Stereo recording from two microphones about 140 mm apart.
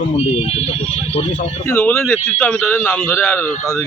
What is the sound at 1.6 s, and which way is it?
Speech, 10° left (ahead or behind).